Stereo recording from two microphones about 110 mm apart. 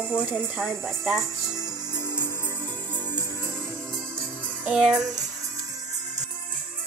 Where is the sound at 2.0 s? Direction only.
25° left (ahead or behind).